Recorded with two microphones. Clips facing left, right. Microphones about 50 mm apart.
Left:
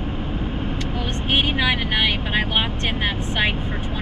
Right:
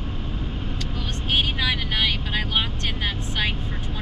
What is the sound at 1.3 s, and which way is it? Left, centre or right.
Speech, left.